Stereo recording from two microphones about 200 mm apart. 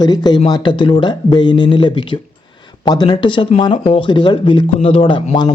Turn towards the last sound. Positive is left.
turn(degrees=25)  # may be behind; listen again after turning